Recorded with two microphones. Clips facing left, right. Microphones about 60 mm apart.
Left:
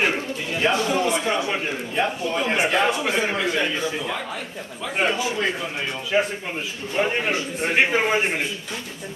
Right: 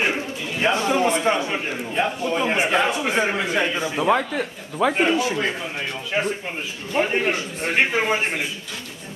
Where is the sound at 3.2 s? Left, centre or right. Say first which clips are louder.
Right 1 dB; centre.